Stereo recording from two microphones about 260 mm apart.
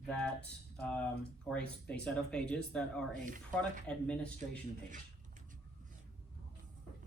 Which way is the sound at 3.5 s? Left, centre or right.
Centre.